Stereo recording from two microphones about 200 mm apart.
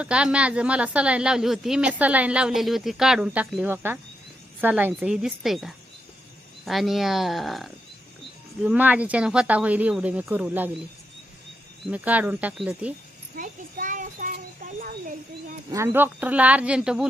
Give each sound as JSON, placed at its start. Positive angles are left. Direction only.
{"t": 0.0, "sound": "a woman's voice", "side_deg": -5}
{"t": 11.9, "sound": "speech", "side_deg": -10}
{"t": 13.3, "sound": "a sound", "side_deg": -45}
{"t": 15.7, "sound": "speech", "side_deg": -10}